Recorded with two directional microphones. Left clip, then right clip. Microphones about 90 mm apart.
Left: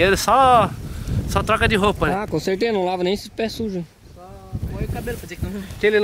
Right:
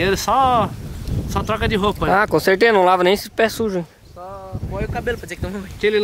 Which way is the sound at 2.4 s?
35° right (ahead or behind).